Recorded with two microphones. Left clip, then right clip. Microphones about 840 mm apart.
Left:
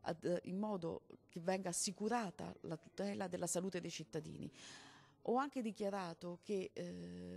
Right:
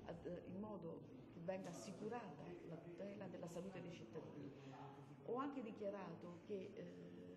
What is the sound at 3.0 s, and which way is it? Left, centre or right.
A woman's voice, left.